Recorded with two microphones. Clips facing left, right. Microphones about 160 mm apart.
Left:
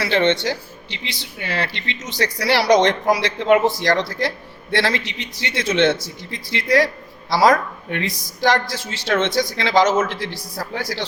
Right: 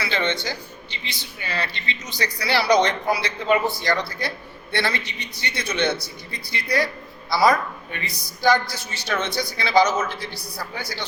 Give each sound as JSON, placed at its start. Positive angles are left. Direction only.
{"t": 0.0, "sound": "speech", "side_deg": 70}
{"t": 3.8, "sound": "a man's voice", "side_deg": 90}